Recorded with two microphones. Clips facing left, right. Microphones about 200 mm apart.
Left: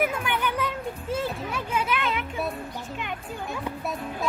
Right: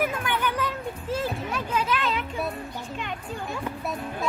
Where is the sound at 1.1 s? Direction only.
5° left (ahead or behind).